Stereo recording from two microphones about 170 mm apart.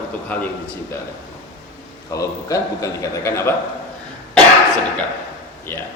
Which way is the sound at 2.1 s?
20° left (ahead or behind).